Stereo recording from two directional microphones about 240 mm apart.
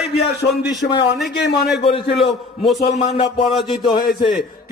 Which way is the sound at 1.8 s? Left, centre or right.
Left.